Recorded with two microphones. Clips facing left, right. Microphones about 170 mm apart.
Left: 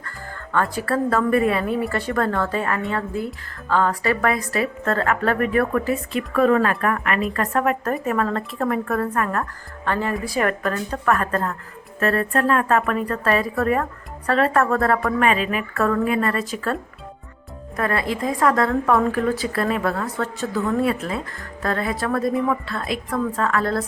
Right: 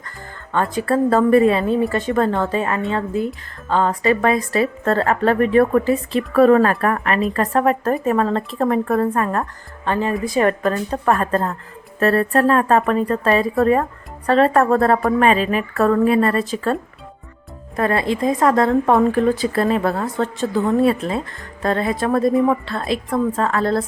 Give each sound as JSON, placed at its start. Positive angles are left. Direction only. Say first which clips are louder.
{"t": 0.5, "sound": "a woman's voice", "louder": "right 3 dB", "side_deg": -20}
{"t": 17.7, "sound": "a woman's voice", "louder": "right 4 dB", "side_deg": -25}